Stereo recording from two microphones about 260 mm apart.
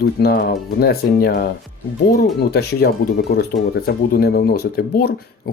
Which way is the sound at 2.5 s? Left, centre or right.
Left.